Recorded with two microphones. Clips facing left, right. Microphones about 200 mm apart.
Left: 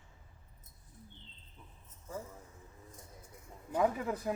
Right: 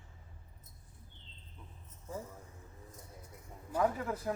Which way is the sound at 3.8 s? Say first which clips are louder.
Left 1 dB; 15° left (ahead or behind).